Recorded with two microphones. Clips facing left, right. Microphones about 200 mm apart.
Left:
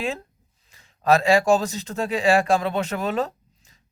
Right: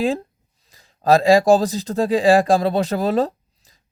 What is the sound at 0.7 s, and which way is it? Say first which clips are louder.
A man's voice: right 3 dB; 35° right (ahead or behind).